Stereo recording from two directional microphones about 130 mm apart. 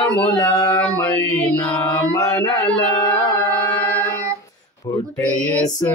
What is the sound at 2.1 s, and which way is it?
Music, 30° left (ahead or behind).